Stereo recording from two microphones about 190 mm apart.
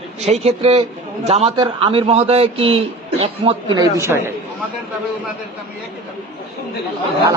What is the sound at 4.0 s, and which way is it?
Speech, 15° right (ahead or behind).